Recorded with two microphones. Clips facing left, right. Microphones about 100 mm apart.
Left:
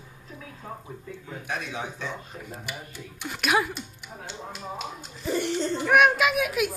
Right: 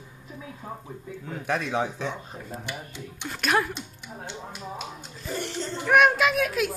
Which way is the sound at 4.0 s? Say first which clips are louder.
Right 1 dB; 15° right (ahead or behind).